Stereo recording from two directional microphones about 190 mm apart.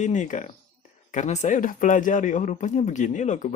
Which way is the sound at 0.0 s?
40° left (ahead or behind).